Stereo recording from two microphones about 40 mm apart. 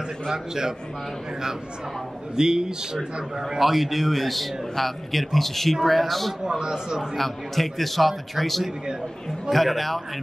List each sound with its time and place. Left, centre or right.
0.3 s a man's voice: centre
2.3 s a man's voice: centre
3.4 s a man's voice: centre
6.4 s a man's voice: centre
7.2 s a man's voice: centre